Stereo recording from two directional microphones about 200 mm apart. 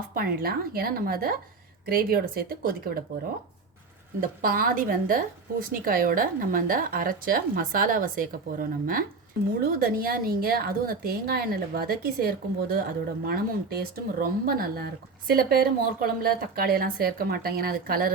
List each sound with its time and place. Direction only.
0.1 s a woman's voice: 45° right (ahead or behind)
4.2 s a woman's voice: 45° right (ahead or behind)